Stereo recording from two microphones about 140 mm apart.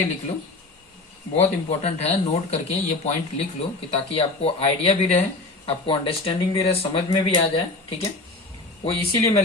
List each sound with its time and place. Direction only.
1.4 s speech: 50° left (ahead or behind)